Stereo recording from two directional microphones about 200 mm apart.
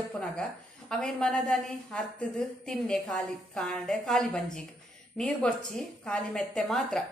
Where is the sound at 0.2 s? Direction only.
5° left (ahead or behind).